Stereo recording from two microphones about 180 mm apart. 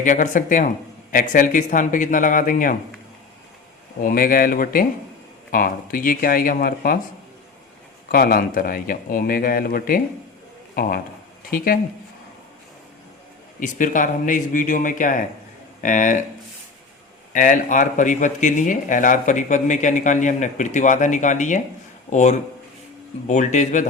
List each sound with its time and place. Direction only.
0.0 s speech: 45° left (ahead or behind)
4.0 s speech: 50° left (ahead or behind)
8.1 s speech: 55° left (ahead or behind)
13.6 s speech: 45° left (ahead or behind)
17.3 s speech: 45° left (ahead or behind)